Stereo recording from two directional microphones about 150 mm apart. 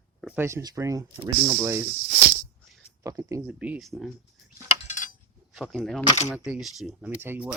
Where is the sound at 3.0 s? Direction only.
20° right (ahead or behind).